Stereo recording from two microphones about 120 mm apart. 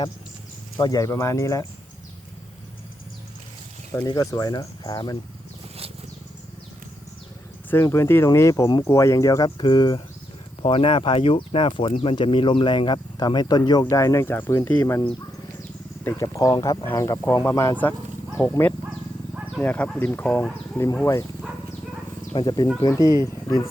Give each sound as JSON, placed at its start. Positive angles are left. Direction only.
{"t": 0.8, "sound": "speech", "side_deg": 30}
{"t": 4.0, "sound": "speech", "side_deg": 30}
{"t": 7.7, "sound": "speech", "side_deg": 25}
{"t": 9.6, "sound": "speech", "side_deg": 40}
{"t": 16.2, "sound": "speech", "side_deg": 30}
{"t": 18.3, "sound": "dog", "side_deg": 10}
{"t": 19.5, "sound": "speech", "side_deg": 10}
{"t": 22.4, "sound": "speech", "side_deg": 35}